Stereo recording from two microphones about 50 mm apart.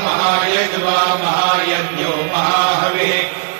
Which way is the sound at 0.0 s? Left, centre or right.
Left.